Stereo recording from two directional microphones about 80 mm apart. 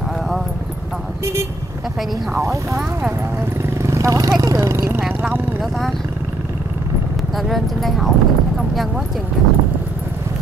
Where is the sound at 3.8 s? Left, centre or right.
Right.